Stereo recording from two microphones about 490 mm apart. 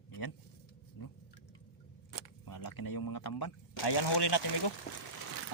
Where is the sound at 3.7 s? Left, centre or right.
Left.